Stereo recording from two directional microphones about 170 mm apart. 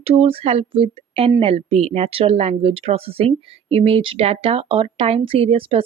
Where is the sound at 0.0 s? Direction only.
35° right (ahead or behind).